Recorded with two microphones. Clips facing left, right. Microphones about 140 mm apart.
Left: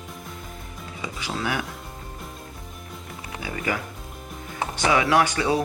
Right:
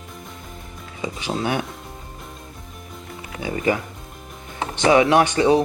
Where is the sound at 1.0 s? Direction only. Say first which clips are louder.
Right 5 dB; 25° right (ahead or behind).